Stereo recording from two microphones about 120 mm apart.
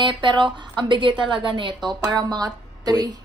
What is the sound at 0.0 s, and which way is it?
A woman's voice, 40° right (ahead or behind).